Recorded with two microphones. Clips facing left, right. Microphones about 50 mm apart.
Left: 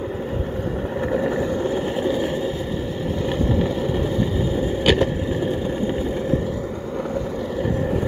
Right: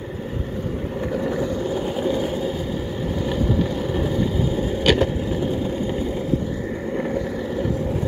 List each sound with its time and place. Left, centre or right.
1.1 s boat: centre
2.0 s vehicle: centre
4.8 s vehicle: centre